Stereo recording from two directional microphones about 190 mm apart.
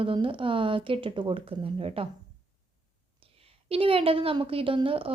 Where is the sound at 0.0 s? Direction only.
25° right (ahead or behind).